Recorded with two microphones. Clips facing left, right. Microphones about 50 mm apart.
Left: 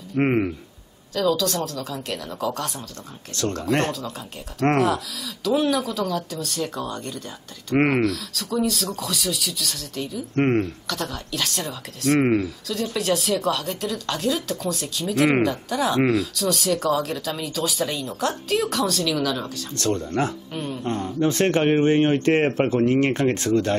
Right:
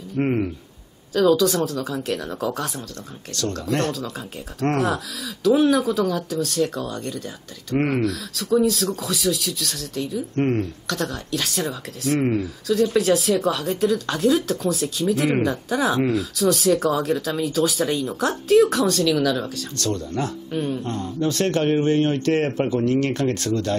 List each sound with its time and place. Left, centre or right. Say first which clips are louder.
0.1 s speech: left 1 dB; left
1.1 s speech: right 5 dB; centre
3.3 s speech: left 1 dB; left
4.9 s speech: even; centre
10.3 s speech: left 2 dB; left
10.9 s speech: right 3 dB; centre
12.2 s speech: left 3 dB; left
12.6 s speech: right 6 dB; centre
19.8 s speech: left 2 dB; left
20.5 s speech: right 5 dB; centre
20.8 s speech: left 2 dB; left